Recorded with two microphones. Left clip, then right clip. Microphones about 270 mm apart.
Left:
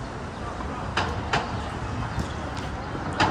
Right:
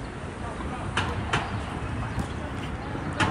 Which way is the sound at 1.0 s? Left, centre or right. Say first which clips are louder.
Left 2 dB; left.